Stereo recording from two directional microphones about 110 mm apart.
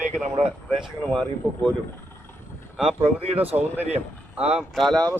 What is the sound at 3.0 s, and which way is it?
Speech, 65° right (ahead or behind).